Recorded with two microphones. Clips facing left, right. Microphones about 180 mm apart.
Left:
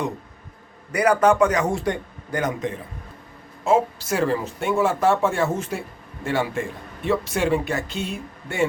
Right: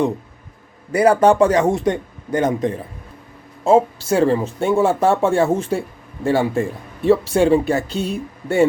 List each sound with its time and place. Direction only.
0.9 s speech: 30° right (ahead or behind)